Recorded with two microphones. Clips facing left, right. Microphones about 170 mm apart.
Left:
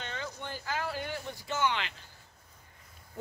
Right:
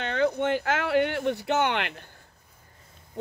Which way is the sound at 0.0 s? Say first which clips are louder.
Right 15 dB; 65° right (ahead or behind).